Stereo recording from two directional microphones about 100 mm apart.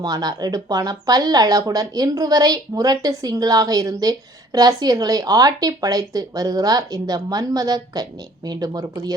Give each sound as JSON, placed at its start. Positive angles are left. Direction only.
{"t": 0.0, "sound": "speech", "side_deg": -40}